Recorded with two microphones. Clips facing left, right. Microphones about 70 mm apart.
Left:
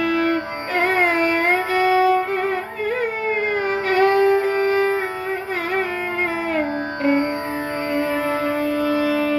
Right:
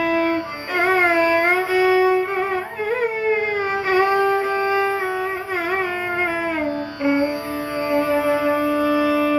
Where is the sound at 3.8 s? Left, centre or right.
Centre.